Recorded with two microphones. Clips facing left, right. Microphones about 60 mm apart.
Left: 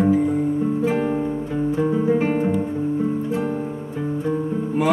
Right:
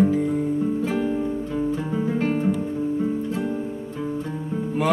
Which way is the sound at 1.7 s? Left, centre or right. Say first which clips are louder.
Left 5 dB; centre.